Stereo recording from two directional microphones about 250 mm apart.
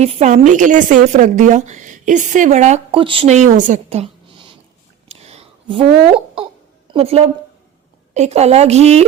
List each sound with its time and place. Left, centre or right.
0.0 s a woman's voice: right
5.0 s a sound: right
6.1 s a woman's voice: right